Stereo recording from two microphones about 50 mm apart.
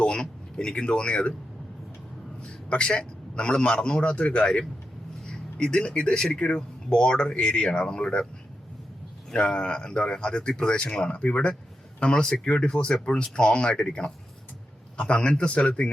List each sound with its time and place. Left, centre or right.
0.0 s speech: centre
2.6 s speech: left
9.3 s speech: centre